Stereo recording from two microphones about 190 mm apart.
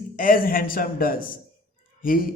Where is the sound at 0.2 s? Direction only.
45° left (ahead or behind).